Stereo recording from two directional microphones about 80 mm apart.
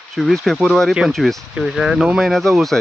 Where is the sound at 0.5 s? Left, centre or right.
Centre.